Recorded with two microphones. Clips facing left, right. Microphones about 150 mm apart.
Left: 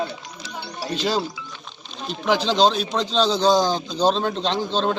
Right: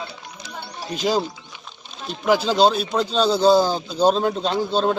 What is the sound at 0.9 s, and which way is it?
Speech, 10° right (ahead or behind).